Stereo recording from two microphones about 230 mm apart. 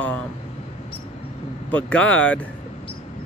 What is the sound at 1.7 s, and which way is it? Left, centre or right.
Speech, centre.